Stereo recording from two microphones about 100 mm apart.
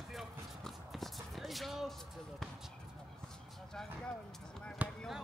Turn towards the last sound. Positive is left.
turn(degrees=-15)  # may be behind; listen again after turning